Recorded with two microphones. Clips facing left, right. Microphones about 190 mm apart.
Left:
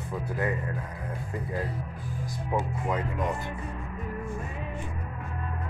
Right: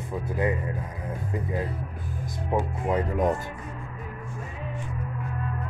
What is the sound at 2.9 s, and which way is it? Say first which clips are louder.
Speech: right 6 dB; 40° right (ahead or behind).